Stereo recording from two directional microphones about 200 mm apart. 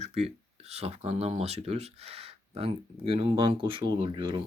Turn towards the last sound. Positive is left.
turn(degrees=-25)  # may be behind; listen again after turning